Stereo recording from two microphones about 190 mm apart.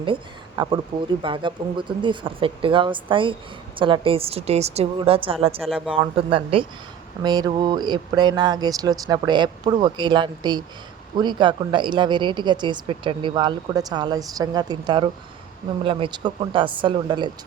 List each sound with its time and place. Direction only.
0.0 s speech: 25° right (ahead or behind)
5.6 s speech: centre (ahead or behind)
5.9 s speech: 30° right (ahead or behind)